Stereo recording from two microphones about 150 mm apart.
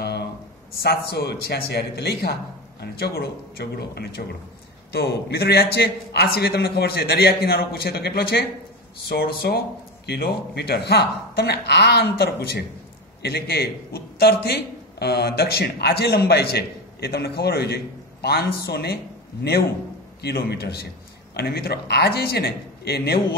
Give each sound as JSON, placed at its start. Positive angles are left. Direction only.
{"t": 0.0, "sound": "a sound", "side_deg": 90}
{"t": 0.8, "sound": "a man's voice", "side_deg": 90}
{"t": 20.2, "sound": "a man's voice", "side_deg": 90}